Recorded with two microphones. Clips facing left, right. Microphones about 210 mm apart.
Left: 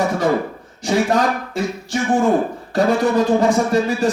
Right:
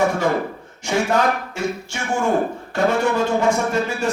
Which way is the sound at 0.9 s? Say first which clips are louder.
Left 2 dB; 35° left (ahead or behind).